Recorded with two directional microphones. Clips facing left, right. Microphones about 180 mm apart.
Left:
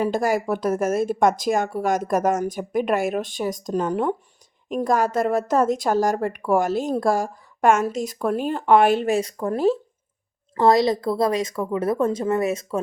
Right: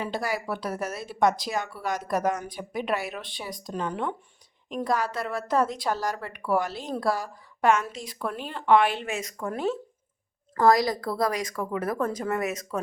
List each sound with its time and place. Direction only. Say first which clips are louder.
0.0 s a woman's voice: left 8 dB; 45° left (ahead or behind)
10.5 s a woman's voice: left 4 dB; 25° left (ahead or behind)